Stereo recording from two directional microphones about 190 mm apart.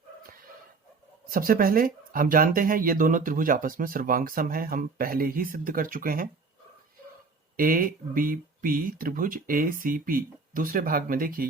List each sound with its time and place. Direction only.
1.3 s speech: 50° right (ahead or behind)
7.5 s speech: 50° right (ahead or behind)